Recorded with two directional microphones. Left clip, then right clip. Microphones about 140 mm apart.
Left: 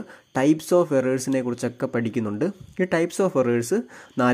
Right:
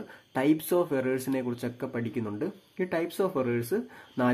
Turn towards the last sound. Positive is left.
turn(degrees=40)  # may be behind; listen again after turning